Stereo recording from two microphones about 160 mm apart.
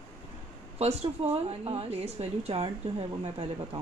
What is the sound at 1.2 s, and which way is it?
A woman's voice, 35° right (ahead or behind).